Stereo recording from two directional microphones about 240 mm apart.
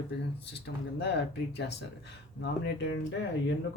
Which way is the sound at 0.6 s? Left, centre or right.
Left.